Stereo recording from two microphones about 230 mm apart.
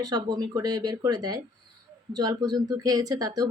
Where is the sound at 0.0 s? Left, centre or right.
Centre.